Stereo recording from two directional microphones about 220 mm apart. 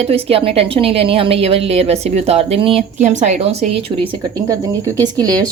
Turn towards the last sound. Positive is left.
turn(degrees=-15)  # may be behind; listen again after turning